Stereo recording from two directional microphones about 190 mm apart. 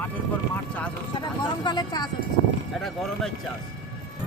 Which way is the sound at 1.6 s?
20° left (ahead or behind).